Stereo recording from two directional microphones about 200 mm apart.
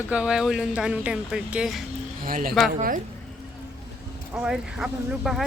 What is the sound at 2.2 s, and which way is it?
Speech, 45° right (ahead or behind).